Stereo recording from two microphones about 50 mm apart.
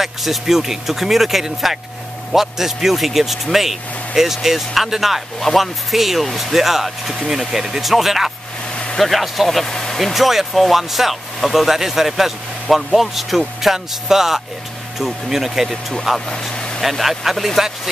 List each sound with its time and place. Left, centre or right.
0.0 s speech: centre
9.9 s speech: centre
16.3 s vehicle: centre
17.0 s speech: centre